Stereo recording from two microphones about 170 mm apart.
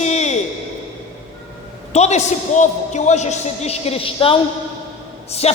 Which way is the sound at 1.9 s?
40° left (ahead or behind).